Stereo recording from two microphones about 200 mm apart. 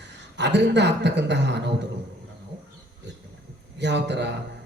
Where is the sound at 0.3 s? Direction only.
60° right (ahead or behind).